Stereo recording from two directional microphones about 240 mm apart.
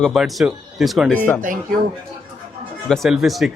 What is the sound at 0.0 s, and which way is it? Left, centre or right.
Speech, centre.